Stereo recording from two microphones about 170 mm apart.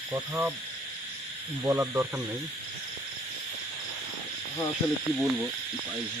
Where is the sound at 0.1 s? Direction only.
10° right (ahead or behind).